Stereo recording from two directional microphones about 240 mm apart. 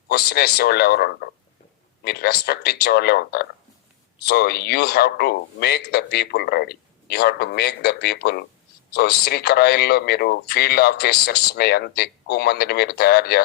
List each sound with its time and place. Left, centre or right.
0.1 s speech: left